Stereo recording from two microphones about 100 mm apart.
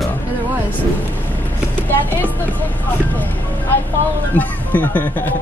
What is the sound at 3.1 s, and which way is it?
Vehicle, 15° left (ahead or behind).